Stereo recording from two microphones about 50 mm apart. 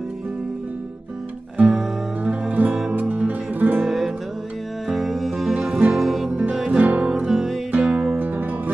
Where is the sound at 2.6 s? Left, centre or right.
Right.